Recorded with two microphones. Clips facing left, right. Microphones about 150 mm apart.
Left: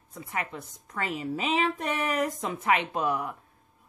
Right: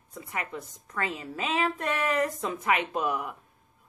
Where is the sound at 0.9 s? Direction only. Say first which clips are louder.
Left 2 dB; 20° left (ahead or behind).